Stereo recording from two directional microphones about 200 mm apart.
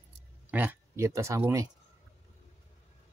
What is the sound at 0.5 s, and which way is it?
Speech, 10° right (ahead or behind).